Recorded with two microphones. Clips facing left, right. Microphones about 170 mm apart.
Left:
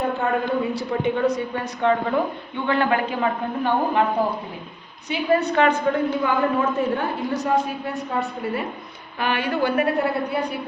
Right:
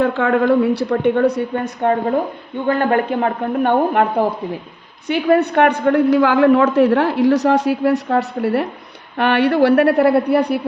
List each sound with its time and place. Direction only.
0.0 s a woman's voice: 85° right; by 4.0 s 60° right (ahead or behind)
5.0 s a woman's voice: 60° right (ahead or behind)